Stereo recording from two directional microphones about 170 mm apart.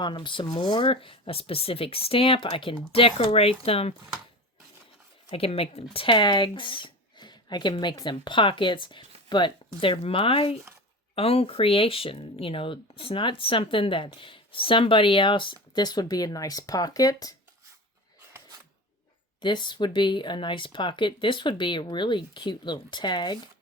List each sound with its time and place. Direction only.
0.0 s speech: 25° left (ahead or behind)
5.3 s speech: 35° left (ahead or behind)
19.4 s speech: 25° left (ahead or behind)